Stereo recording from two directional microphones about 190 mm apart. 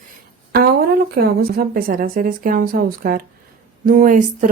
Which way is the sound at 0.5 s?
55° right (ahead or behind).